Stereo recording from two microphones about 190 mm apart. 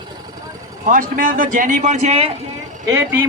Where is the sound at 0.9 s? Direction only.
45° right (ahead or behind).